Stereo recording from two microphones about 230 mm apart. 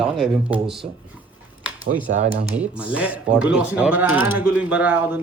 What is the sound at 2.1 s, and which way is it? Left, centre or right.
Speech, right.